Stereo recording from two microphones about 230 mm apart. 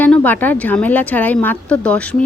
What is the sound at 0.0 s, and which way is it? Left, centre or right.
A woman's voice, centre.